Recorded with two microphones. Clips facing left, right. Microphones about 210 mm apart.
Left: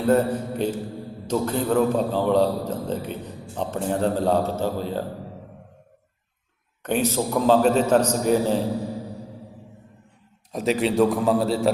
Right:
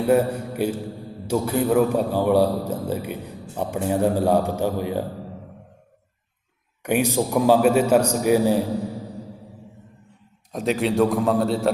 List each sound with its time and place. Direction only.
0.1 s a man's voice: 10° right (ahead or behind)
6.8 s a man's voice: 10° right (ahead or behind)
10.5 s a man's voice: centre (ahead or behind)